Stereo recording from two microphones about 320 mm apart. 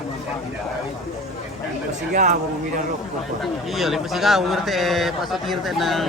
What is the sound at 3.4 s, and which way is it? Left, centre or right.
A man's voice, centre.